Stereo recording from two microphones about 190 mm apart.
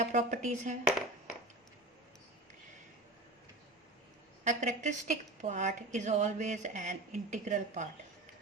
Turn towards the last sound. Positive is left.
turn(degrees=-40)  # may be behind; listen again after turning